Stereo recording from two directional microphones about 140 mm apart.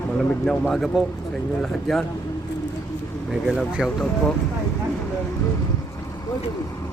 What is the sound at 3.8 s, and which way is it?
Speech, centre (ahead or behind).